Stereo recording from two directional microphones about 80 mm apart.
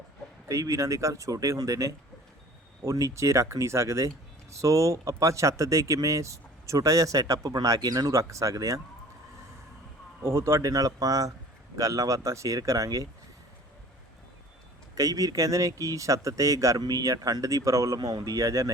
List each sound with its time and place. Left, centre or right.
0.4 s speech: right
10.2 s speech: right
14.9 s speech: right